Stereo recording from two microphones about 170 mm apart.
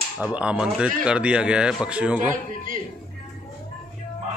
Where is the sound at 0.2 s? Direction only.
5° right (ahead or behind).